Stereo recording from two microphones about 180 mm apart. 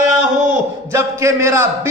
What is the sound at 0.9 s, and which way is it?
A man's voice, 15° right (ahead or behind).